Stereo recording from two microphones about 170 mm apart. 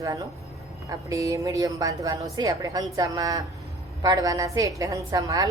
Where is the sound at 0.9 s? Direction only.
20° right (ahead or behind).